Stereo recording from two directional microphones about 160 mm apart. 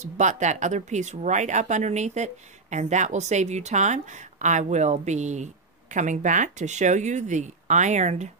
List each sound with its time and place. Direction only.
0.0 s speech: 50° right (ahead or behind)